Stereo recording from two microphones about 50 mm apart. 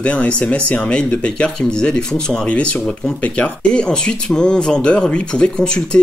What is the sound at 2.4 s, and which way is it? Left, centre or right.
Speech, left.